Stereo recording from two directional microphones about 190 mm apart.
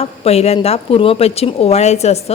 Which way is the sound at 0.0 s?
35° left (ahead or behind).